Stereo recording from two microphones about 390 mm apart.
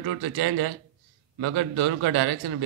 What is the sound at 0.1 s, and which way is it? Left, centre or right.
A man's voice, right.